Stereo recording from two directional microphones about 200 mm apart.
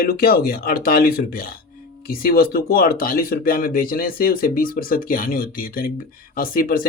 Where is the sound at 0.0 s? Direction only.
50° left (ahead or behind).